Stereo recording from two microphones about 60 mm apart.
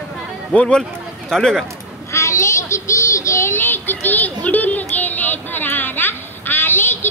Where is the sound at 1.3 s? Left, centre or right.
Centre.